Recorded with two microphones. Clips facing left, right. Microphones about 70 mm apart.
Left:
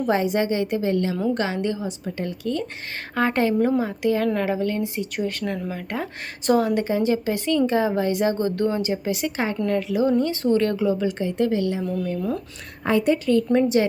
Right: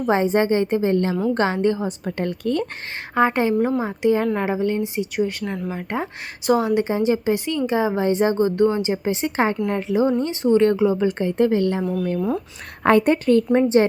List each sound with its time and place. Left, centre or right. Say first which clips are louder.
0.0 s a woman's voice: right 3 dB; right
2.0 s a woman's voice: right 4 dB; right
3.2 s a woman's voice: right 2 dB; right
6.4 s speech: right 1 dB; centre
6.7 s a woman's voice: right 2 dB; right
12.8 s a woman's voice: right 4 dB; right
13.5 s a woman's voice: right 1 dB; right